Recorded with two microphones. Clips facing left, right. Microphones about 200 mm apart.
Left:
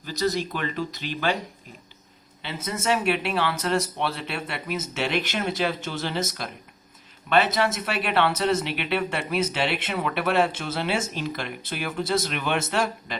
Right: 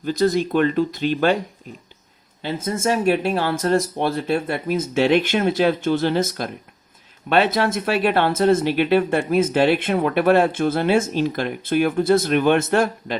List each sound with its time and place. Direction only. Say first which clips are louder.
0.0 s speech: right 7 dB; 50° right (ahead or behind)
2.4 s speech: right 7 dB; 50° right (ahead or behind)